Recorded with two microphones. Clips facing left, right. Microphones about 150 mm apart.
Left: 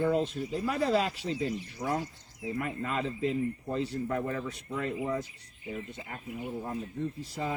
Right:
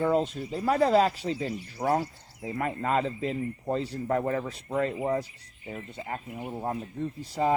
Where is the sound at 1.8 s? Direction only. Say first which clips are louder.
Right 7 dB; 60° right (ahead or behind).